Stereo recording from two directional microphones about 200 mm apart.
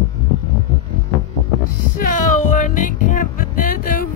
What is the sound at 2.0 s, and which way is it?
Music, 40° left (ahead or behind).